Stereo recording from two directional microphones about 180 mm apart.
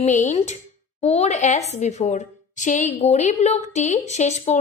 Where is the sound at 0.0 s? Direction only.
40° left (ahead or behind).